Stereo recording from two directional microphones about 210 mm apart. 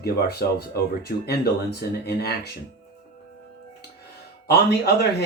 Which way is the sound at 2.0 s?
50° left (ahead or behind).